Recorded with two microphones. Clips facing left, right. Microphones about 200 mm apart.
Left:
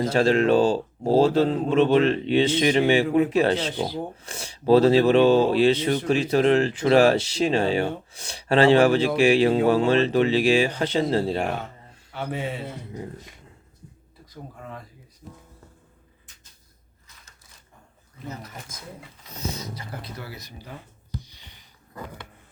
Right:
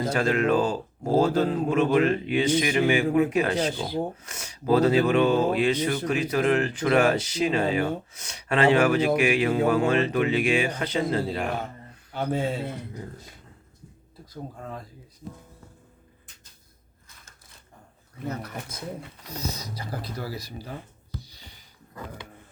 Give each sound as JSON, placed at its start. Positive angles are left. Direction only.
{"t": 0.1, "sound": "speech", "side_deg": 30}
{"t": 18.3, "sound": "speech", "side_deg": -60}
{"t": 18.7, "sound": "speech", "side_deg": -35}